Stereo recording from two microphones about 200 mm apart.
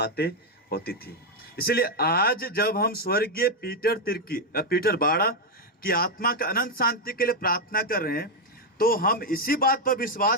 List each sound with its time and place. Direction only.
0.0 s a man's voice: 55° left (ahead or behind)